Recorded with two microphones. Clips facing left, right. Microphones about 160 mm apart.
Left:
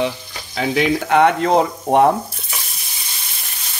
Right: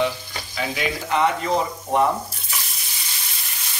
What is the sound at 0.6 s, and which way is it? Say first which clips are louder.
Speech: left 8 dB; 75° left (ahead or behind).